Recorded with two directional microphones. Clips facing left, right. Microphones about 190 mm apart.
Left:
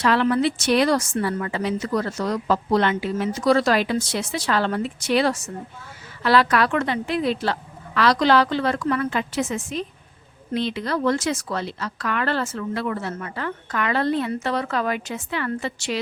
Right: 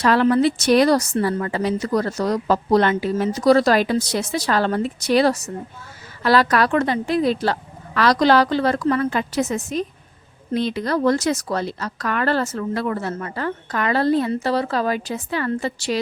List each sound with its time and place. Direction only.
0.0 s a woman's voice: 40° right (ahead or behind)